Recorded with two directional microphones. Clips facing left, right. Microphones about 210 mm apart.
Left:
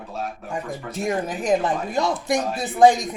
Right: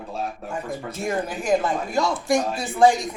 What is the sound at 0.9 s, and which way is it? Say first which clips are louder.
Speech: left 2 dB; 15° left (ahead or behind).